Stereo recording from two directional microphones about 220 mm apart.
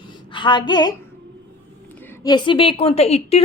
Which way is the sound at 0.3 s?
20° left (ahead or behind).